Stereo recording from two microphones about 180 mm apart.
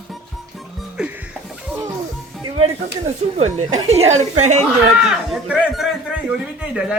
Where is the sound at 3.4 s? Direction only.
35° right (ahead or behind).